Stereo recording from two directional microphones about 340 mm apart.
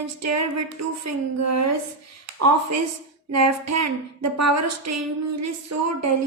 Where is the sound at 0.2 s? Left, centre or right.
Right.